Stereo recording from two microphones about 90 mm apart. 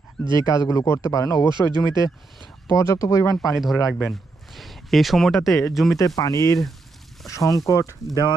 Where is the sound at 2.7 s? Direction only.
35° left (ahead or behind).